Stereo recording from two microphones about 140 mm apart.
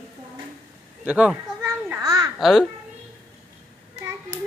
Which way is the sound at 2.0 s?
25° right (ahead or behind).